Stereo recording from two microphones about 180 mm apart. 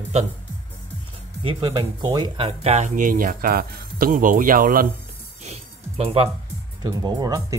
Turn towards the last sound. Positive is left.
turn(degrees=-20)  # may be behind; listen again after turning